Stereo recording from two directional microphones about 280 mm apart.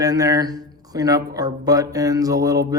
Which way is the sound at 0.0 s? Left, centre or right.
Centre.